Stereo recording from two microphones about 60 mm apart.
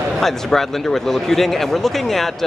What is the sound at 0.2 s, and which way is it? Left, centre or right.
Speech, centre.